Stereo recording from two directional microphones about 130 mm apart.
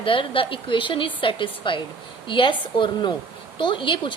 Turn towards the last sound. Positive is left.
turn(degrees=40)  # may be behind; listen again after turning